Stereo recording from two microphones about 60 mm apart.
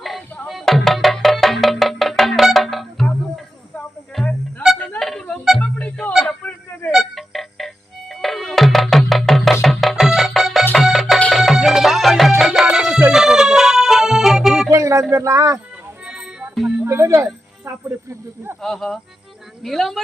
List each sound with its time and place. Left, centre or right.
0.4 s music: centre
4.2 s music: centre
5.5 s music: centre
6.9 s music: centre
14.7 s music: right
15.1 s a sound: right
16.0 s music: centre
16.8 s music: right
17.7 s music: right
18.6 s music: centre
19.6 s a sound: centre